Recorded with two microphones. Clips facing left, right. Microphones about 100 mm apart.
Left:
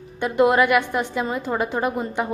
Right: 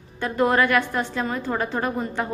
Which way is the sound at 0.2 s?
20° left (ahead or behind).